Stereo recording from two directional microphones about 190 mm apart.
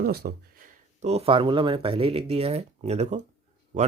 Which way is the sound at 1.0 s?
35° right (ahead or behind).